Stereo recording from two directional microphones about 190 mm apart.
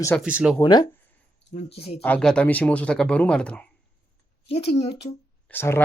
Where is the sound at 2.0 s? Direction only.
5° left (ahead or behind).